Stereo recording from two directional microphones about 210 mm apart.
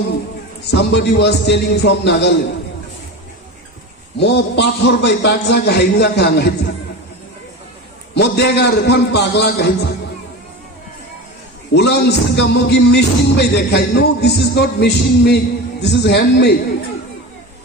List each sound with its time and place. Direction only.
0.7 s music: 55° left (ahead or behind)
4.2 s music: 55° left (ahead or behind)
8.1 s music: 55° left (ahead or behind)
11.7 s music: 55° left (ahead or behind)